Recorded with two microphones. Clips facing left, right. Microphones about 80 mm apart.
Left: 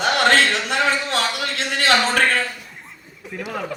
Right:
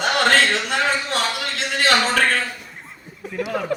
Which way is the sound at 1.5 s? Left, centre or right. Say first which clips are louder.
Even; left.